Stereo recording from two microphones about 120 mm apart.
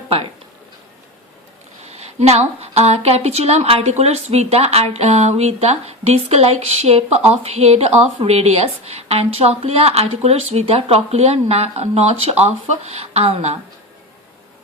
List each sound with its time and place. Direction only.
1.9 s a woman's voice: 65° right (ahead or behind)